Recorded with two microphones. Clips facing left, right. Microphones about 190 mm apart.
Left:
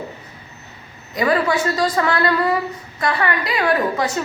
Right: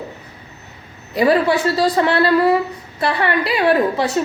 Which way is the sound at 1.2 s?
30° right (ahead or behind).